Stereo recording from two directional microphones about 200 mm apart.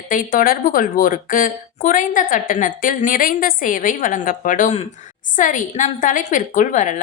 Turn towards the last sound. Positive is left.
turn(degrees=40)  # may be behind; listen again after turning